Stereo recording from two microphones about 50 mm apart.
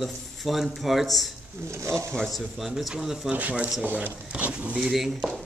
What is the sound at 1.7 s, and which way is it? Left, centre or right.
Speech, right.